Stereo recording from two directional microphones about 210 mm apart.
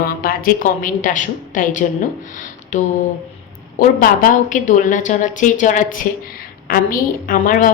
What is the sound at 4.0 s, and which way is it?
A woman's voice, 40° left (ahead or behind).